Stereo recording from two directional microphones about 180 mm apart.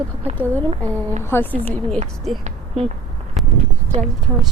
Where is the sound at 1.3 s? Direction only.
15° left (ahead or behind).